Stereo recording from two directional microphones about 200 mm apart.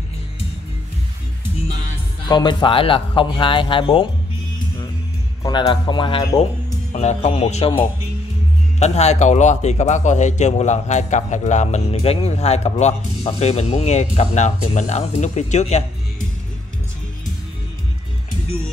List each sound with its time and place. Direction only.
2.2 s a man's voice: 25° left (ahead or behind)
5.4 s a man's voice: 20° left (ahead or behind)
8.7 s a man's voice: 35° left (ahead or behind)